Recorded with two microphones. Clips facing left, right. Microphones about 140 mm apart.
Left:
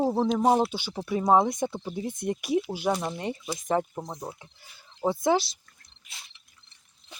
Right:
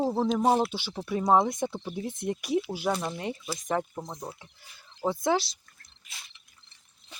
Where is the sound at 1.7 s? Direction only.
10° left (ahead or behind).